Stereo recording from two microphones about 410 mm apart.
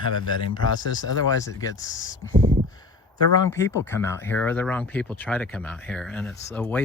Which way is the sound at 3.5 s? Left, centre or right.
Centre.